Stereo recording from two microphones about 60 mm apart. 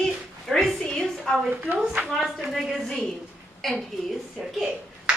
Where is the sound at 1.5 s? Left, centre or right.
Right.